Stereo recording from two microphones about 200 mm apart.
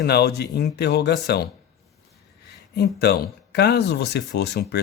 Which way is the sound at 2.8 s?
55° left (ahead or behind).